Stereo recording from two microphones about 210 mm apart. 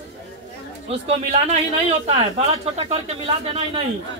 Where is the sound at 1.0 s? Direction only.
30° right (ahead or behind).